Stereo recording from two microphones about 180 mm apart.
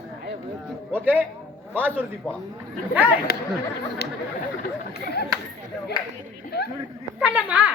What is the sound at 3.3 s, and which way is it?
Speech, 55° left (ahead or behind).